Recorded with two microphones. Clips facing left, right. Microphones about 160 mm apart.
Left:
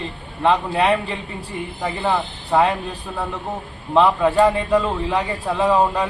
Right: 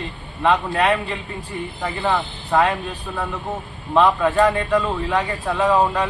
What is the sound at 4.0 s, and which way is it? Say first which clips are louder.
Speech: left 1 dB; 10° left (ahead or behind).